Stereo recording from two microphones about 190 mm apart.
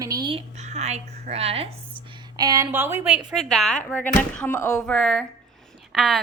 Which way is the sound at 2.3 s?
20° right (ahead or behind).